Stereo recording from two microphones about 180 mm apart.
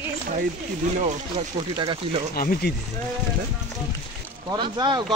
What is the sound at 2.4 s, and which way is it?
Speech, 55° left (ahead or behind).